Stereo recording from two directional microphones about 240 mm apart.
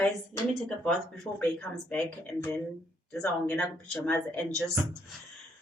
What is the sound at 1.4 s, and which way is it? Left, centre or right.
Speech, centre.